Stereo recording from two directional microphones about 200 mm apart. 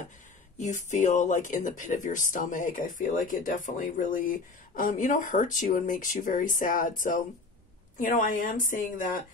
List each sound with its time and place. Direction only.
0.6 s speech: 35° left (ahead or behind)